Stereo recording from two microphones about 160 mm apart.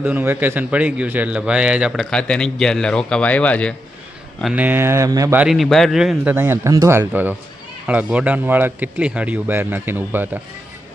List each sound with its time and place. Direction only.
0.0 s a man's voice: 10° right (ahead or behind); by 3.8 s 10° left (ahead or behind)
4.5 s speech: 10° right (ahead or behind)
5.4 s a man's voice: centre (ahead or behind)
6.3 s speech: 15° right (ahead or behind)